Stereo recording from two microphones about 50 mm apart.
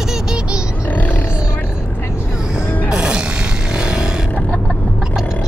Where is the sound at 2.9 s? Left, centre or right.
Centre.